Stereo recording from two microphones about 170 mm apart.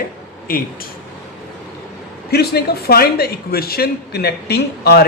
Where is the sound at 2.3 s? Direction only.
65° left (ahead or behind).